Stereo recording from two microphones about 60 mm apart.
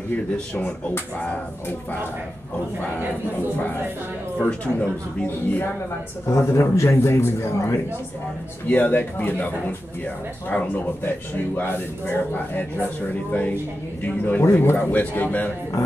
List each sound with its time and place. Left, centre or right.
0.1 s speech: left
4.4 s speech: left
6.3 s a man's voice: left
8.6 s speech: left
13.3 s speech: left